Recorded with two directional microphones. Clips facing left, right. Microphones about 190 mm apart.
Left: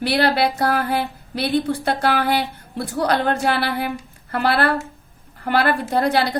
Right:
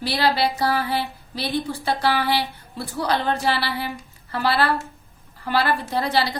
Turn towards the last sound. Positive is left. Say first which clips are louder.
# left 4 dB
turn(degrees=55)  # may be behind; listen again after turning